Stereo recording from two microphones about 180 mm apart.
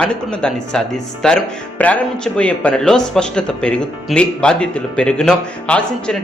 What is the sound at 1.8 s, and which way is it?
A man's voice, 5° left (ahead or behind).